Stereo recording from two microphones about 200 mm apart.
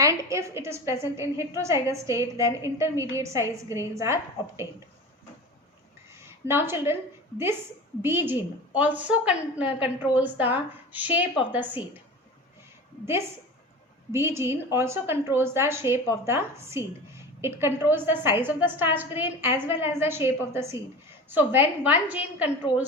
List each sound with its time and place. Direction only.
0.0 s a woman's voice: 15° right (ahead or behind)
6.2 s a woman's voice: 10° right (ahead or behind)
8.0 s a woman's voice: 10° right (ahead or behind)
14.1 s a woman's voice: 10° right (ahead or behind)